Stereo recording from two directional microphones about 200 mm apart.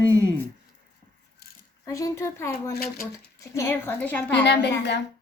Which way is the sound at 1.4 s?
50° left (ahead or behind).